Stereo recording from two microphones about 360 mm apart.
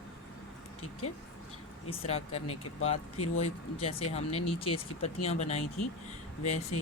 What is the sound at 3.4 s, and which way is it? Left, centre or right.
Speech, centre.